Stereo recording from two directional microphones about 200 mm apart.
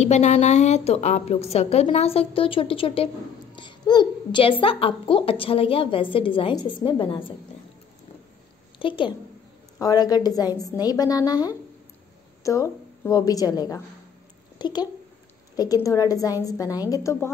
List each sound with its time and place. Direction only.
0.0 s a woman's voice: 35° left (ahead or behind)
8.7 s a woman's voice: 25° left (ahead or behind)